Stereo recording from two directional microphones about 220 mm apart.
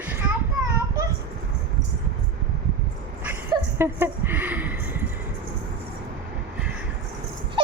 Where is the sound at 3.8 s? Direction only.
10° right (ahead or behind).